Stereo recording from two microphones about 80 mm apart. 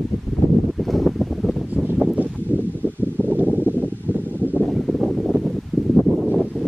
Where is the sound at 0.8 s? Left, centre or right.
Centre.